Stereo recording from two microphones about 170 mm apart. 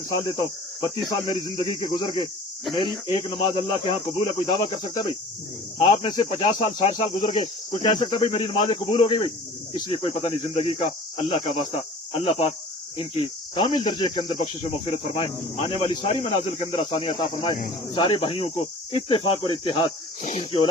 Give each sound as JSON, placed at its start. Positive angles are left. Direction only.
{"t": 0.1, "sound": "speech", "side_deg": 25}